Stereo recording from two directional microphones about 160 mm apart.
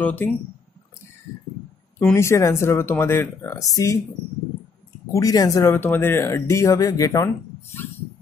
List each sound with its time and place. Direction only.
0.0 s speech: 10° left (ahead or behind)
2.0 s speech: 15° left (ahead or behind)
5.1 s speech: 20° left (ahead or behind)